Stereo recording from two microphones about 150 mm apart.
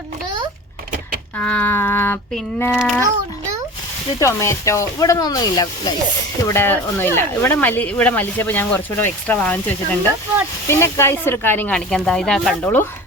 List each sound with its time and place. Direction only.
1.4 s speech: 10° left (ahead or behind)
4.2 s speech: 20° left (ahead or behind)
6.5 s speech: 15° left (ahead or behind)